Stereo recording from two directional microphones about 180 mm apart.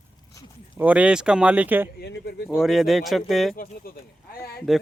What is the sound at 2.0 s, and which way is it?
Speech, 65° left (ahead or behind).